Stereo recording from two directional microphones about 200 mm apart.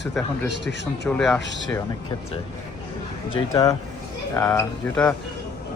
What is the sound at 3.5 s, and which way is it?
Speech, 15° left (ahead or behind).